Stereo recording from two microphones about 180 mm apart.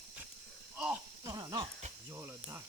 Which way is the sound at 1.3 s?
20° right (ahead or behind).